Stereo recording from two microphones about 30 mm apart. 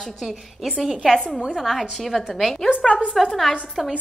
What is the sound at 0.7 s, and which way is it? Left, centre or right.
A woman's voice, centre.